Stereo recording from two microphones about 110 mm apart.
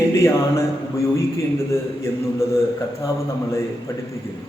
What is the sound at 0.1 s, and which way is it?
Speech, 25° left (ahead or behind).